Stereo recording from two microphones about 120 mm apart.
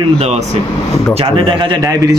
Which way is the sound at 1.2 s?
45° right (ahead or behind).